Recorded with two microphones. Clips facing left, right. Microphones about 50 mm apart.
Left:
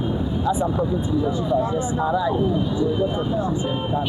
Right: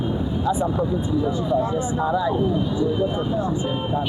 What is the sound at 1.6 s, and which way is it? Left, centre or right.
Speech, left.